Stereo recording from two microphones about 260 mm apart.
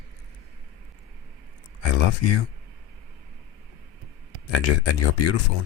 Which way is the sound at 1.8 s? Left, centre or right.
Left.